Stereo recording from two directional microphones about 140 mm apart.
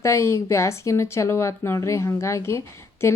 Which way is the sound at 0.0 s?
20° left (ahead or behind).